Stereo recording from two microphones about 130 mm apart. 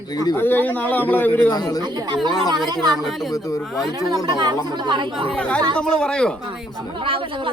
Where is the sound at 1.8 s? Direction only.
35° right (ahead or behind).